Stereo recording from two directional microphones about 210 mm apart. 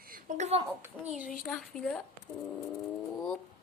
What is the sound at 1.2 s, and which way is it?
Speech, centre (ahead or behind).